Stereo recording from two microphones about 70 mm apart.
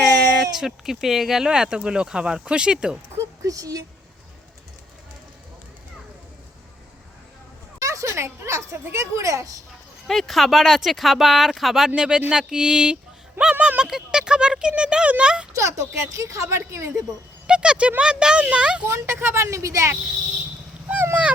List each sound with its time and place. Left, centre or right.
0.5 s speech: centre
3.4 s speech: right
7.8 s a sound: right
8.1 s a woman's voice: right
10.1 s speech: centre
15.5 s speech: right
17.4 s speech: centre
18.9 s a woman's voice: right
20.8 s a sound: right